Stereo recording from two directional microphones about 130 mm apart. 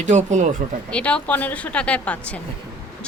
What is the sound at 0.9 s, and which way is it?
A woman's voice, 10° left (ahead or behind).